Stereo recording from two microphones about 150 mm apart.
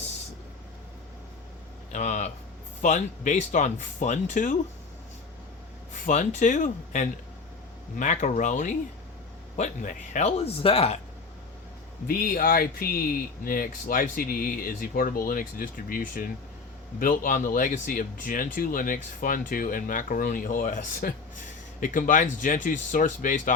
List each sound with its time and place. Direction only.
1.9 s a sound: 50° left (ahead or behind)
2.8 s speech: 55° left (ahead or behind)
5.9 s speech: 55° left (ahead or behind)
12.0 s speech: 80° left; by 23.6 s 60° left (ahead or behind)